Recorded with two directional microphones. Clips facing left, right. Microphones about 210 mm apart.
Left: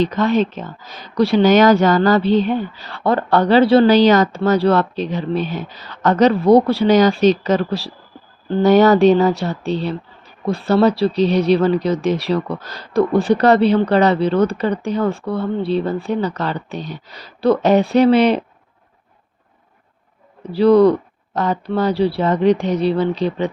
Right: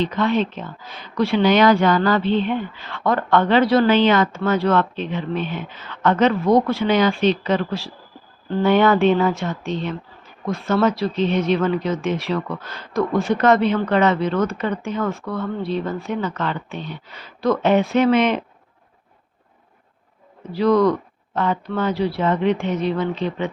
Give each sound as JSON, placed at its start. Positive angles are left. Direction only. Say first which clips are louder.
{"t": 0.0, "sound": "speech", "louder": "left 4 dB", "side_deg": 40}
{"t": 20.4, "sound": "speech", "louder": "left 5 dB", "side_deg": 30}